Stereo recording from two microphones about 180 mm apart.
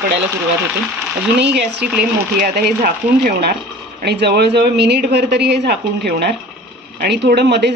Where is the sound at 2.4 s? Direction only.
60° right (ahead or behind).